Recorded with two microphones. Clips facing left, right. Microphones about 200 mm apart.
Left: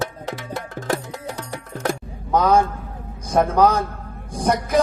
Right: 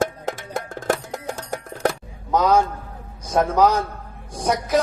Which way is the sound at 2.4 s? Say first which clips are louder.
Left 1 dB; 55° left (ahead or behind).